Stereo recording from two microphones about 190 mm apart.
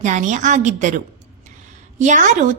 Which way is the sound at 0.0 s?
40° right (ahead or behind).